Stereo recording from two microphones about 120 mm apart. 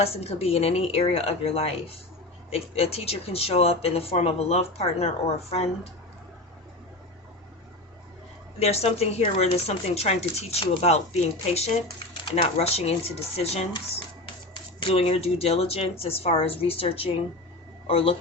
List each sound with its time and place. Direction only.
0.0 s speech: 55° left (ahead or behind)
8.5 s speech: 60° left (ahead or behind)
14.8 s speech: 55° left (ahead or behind)